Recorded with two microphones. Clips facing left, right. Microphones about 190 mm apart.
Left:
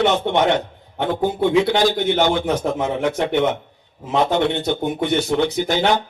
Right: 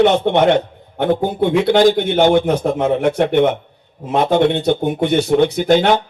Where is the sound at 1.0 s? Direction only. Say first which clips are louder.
Right 3 dB; 55° right (ahead or behind).